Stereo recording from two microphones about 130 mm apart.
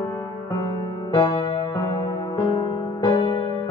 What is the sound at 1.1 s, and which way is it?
Electric piano, 40° left (ahead or behind).